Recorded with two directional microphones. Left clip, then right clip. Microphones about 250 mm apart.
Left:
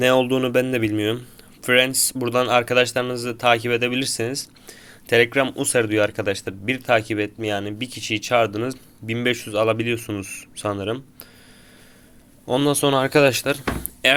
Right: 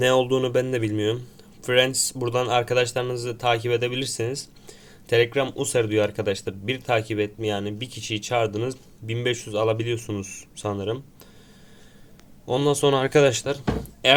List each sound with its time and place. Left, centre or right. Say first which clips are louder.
0.0 s speech: left 2 dB; centre
12.5 s speech: left 1 dB; centre
14.0 s speech: even; left